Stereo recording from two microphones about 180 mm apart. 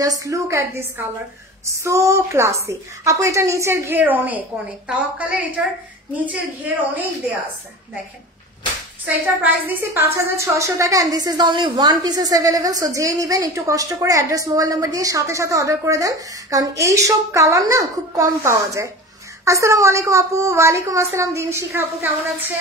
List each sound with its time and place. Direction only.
0.0 s a woman's voice: 20° right (ahead or behind)
9.0 s a woman's voice: 10° right (ahead or behind)